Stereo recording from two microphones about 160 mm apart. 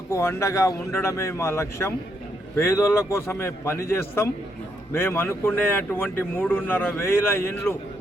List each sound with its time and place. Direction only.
0.1 s speech: 15° left (ahead or behind)